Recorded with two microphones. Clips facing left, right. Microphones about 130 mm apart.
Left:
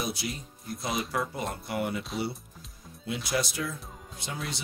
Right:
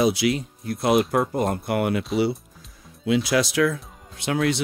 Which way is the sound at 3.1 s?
90° right.